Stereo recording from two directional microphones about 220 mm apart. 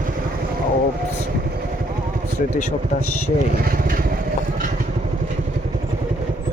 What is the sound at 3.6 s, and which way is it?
Speech, 40° right (ahead or behind).